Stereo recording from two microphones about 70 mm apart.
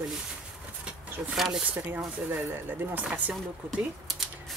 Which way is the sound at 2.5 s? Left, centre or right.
Right.